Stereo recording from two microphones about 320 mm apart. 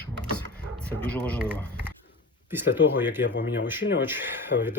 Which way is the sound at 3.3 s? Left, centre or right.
Left.